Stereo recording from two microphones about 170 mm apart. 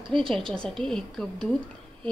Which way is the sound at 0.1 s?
5° left (ahead or behind).